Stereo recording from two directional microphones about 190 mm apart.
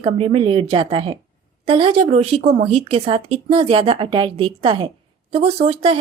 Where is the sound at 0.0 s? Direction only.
30° right (ahead or behind).